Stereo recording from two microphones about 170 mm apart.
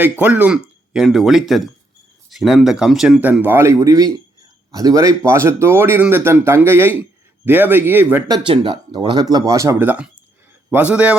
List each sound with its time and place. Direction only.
0.0 s speech: 10° right (ahead or behind)
8.3 s speech: 25° right (ahead or behind); by 11.2 s 10° right (ahead or behind)